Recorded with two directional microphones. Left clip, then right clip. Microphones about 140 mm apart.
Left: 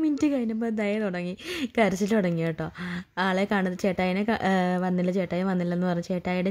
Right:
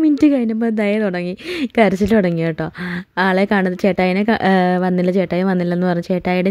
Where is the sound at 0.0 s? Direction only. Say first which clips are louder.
Right 11 dB; 30° right (ahead or behind).